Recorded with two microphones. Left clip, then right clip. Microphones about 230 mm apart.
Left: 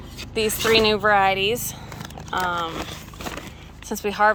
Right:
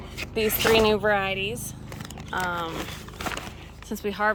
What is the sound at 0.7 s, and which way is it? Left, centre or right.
Speech, centre.